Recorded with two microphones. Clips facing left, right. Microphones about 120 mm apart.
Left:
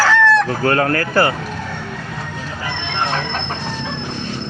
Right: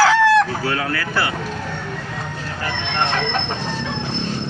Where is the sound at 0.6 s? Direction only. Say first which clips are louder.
Left 6 dB; 50° left (ahead or behind).